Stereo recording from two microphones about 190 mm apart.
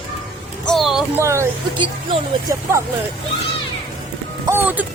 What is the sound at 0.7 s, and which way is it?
Speech, centre (ahead or behind).